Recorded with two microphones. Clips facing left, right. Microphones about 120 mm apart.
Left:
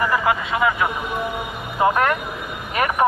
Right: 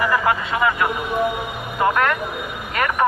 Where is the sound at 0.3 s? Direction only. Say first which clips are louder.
Even; centre (ahead or behind).